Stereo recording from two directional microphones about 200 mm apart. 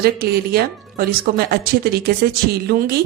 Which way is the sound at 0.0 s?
50° right (ahead or behind).